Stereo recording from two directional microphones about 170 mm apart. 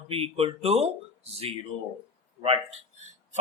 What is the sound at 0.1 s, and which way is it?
Speech, 35° right (ahead or behind).